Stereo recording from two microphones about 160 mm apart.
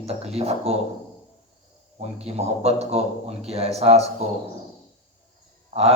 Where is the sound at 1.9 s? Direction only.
40° right (ahead or behind).